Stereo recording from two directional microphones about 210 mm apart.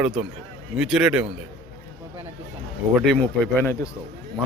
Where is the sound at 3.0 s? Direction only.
5° left (ahead or behind).